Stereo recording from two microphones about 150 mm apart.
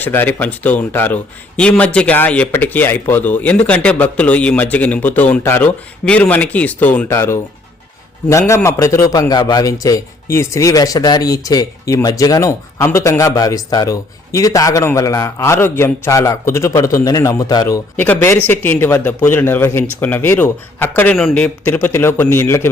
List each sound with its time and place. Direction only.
0.0 s a man's voice: 10° left (ahead or behind)
17.9 s a man's voice: 15° left (ahead or behind)
21.7 s a man's voice: 15° left (ahead or behind)